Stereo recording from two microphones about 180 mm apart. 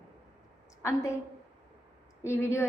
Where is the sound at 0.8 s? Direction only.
15° left (ahead or behind).